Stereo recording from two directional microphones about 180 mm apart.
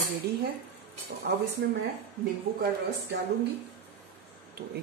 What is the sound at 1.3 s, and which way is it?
Speech, 70° right (ahead or behind).